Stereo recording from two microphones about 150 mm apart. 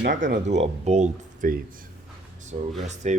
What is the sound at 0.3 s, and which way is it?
Speech, 50° right (ahead or behind).